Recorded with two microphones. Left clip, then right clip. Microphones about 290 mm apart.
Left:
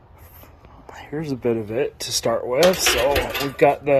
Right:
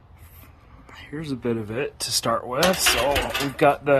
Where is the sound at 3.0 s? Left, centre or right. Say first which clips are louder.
Left 2 dB; centre.